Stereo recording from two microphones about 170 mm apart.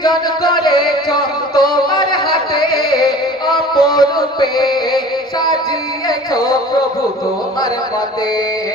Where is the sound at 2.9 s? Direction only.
25° left (ahead or behind).